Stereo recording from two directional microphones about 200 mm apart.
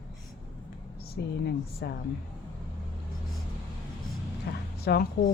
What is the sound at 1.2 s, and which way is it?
Speech, 55° left (ahead or behind).